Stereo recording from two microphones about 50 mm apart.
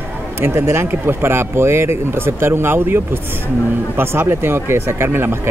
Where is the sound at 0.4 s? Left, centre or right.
Right.